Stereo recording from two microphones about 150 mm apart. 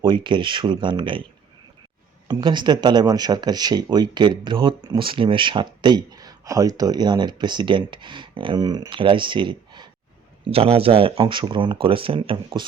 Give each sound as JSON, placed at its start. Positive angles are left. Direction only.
{"t": 0.0, "sound": "speech", "side_deg": -30}
{"t": 2.2, "sound": "speech", "side_deg": -30}